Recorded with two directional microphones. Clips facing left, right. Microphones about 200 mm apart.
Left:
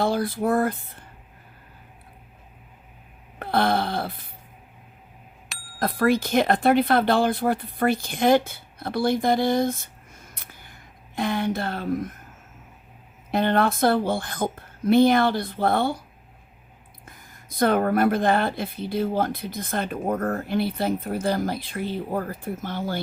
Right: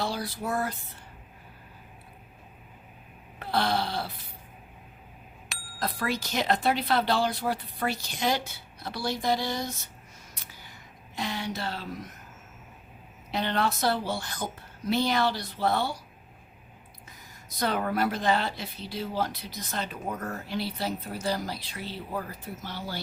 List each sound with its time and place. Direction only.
0.0 s a woman's voice: 55° left (ahead or behind)
3.3 s wail: 55° left (ahead or behind)
5.5 s bicycle bell: centre (ahead or behind)
5.8 s a woman's voice: 55° left (ahead or behind)
10.3 s a sound: 55° left (ahead or behind)
13.3 s a woman's voice: 50° left (ahead or behind)
17.1 s a woman's voice: 55° left (ahead or behind)